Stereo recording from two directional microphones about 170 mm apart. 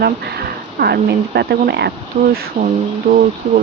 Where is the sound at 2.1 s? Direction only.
45° right (ahead or behind).